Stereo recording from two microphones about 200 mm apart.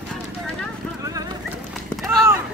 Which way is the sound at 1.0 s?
20° right (ahead or behind).